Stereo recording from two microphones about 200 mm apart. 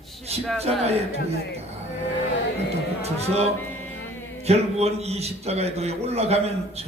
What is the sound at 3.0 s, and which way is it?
Speech, 30° right (ahead or behind).